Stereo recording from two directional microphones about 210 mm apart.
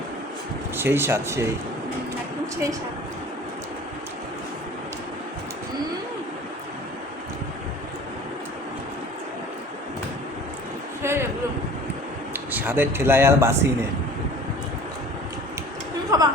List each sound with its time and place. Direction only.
0.8 s speech: 10° right (ahead or behind)
11.0 s a sound: 15° right (ahead or behind)
12.5 s speech: 10° right (ahead or behind)
16.1 s chatter: 20° right (ahead or behind)